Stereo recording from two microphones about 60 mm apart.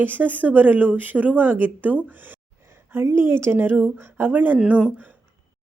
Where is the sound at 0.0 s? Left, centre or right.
Right.